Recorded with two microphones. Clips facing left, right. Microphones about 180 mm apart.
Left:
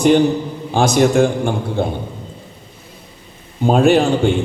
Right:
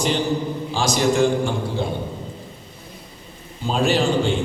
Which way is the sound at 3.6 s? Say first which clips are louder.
Left 7 dB; 55° left (ahead or behind).